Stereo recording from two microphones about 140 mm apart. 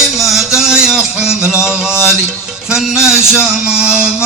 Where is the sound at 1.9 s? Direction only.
20° left (ahead or behind).